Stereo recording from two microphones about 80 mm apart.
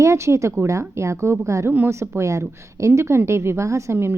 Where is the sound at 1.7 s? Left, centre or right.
Right.